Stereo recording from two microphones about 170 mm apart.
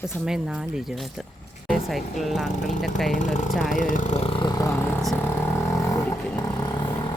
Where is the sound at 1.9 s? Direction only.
Centre (ahead or behind).